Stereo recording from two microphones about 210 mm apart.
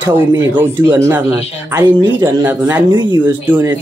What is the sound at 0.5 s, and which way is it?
Speech, 10° right (ahead or behind).